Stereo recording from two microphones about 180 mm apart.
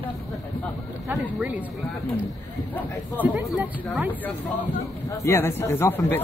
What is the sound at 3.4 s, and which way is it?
Speech, 5° right (ahead or behind).